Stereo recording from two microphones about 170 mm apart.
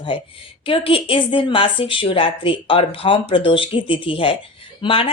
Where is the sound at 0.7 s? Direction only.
30° left (ahead or behind).